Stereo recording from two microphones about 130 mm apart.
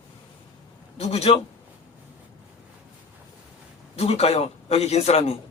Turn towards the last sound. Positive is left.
turn(degrees=55)  # may be behind; listen again after turning